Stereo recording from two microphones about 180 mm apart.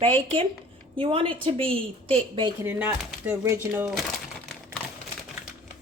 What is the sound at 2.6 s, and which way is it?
Speech, 10° right (ahead or behind).